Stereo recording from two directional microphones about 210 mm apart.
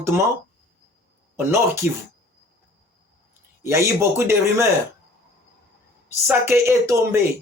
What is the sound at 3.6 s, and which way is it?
Speech, 15° right (ahead or behind).